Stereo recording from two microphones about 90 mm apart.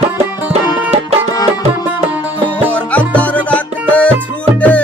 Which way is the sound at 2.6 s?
15° left (ahead or behind).